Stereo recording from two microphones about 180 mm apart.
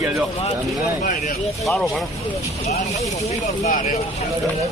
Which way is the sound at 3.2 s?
45° left (ahead or behind).